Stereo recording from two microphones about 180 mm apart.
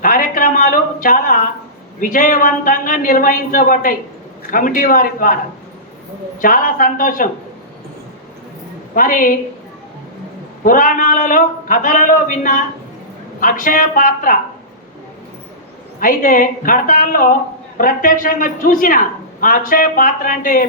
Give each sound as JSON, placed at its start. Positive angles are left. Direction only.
{"t": 0.0, "sound": "a sound", "side_deg": 50}
{"t": 2.0, "sound": "a woman's voice", "side_deg": 50}
{"t": 6.4, "sound": "a woman's voice", "side_deg": 50}
{"t": 9.0, "sound": "a woman's voice", "side_deg": 50}
{"t": 10.6, "sound": "a woman's voice", "side_deg": 50}
{"t": 16.0, "sound": "a woman's voice", "side_deg": 50}